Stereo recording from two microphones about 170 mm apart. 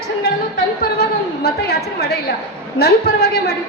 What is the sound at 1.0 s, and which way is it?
A woman's voice, 70° left (ahead or behind).